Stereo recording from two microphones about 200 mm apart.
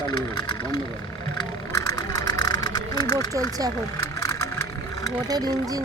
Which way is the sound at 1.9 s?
20° left (ahead or behind).